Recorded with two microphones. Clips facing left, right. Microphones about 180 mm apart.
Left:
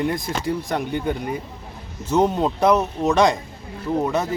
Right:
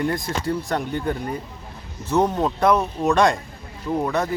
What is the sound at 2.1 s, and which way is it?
Speech, 20° left (ahead or behind).